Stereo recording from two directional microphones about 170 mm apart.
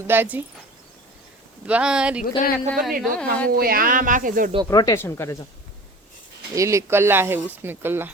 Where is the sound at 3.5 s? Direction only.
60° right (ahead or behind).